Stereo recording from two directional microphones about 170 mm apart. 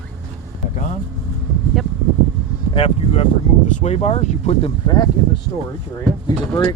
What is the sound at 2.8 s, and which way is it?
Speech, 35° left (ahead or behind).